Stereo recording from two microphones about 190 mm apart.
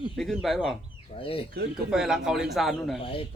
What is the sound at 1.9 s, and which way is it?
Speech, 5° right (ahead or behind).